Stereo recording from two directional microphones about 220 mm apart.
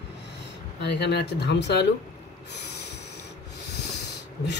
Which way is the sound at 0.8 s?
50° left (ahead or behind).